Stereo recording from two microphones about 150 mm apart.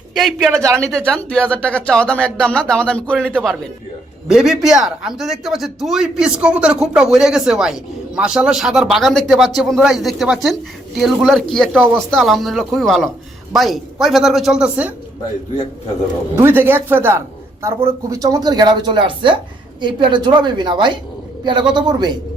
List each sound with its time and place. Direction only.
0.2 s a man's voice: 5° left (ahead or behind)
16.4 s a woman's voice: 15° right (ahead or behind)